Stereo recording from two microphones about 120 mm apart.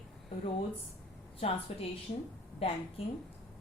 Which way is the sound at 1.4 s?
55° left (ahead or behind).